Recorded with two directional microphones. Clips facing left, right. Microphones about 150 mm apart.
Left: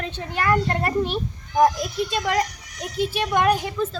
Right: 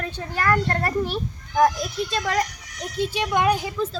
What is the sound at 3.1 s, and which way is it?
Speech, 15° right (ahead or behind).